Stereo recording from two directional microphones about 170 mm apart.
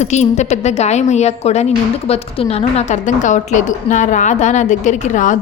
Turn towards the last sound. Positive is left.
turn(degrees=50)  # may be behind; listen again after turning